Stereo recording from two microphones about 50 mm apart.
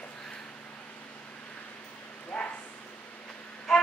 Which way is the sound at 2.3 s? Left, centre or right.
Centre.